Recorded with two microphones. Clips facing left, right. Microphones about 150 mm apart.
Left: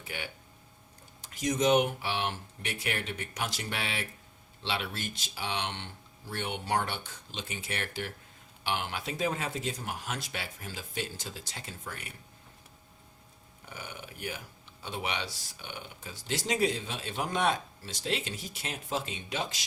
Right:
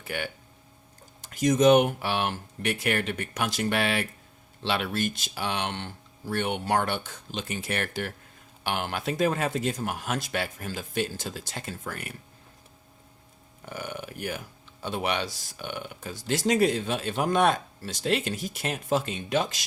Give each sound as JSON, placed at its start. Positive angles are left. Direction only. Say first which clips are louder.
{"t": 1.5, "sound": "speech", "louder": "right 6 dB", "side_deg": -55}
{"t": 13.7, "sound": "speech", "louder": "right 8 dB", "side_deg": -65}